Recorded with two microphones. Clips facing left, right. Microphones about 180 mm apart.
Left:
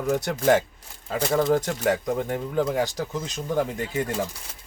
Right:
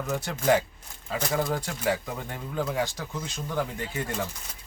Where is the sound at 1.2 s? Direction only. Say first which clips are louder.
Left 6 dB; 25° left (ahead or behind).